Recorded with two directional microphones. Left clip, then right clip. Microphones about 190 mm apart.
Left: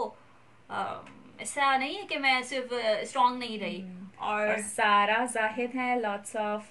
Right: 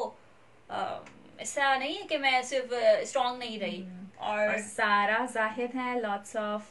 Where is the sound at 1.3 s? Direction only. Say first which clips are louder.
Left 1 dB; centre (ahead or behind).